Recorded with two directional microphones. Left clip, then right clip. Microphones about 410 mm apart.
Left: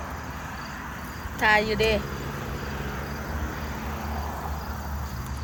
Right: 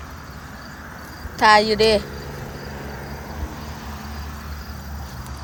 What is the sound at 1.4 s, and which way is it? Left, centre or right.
Speech, centre.